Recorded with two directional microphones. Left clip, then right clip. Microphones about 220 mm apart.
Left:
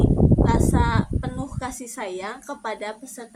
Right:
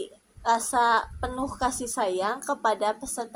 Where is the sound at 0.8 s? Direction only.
Centre (ahead or behind).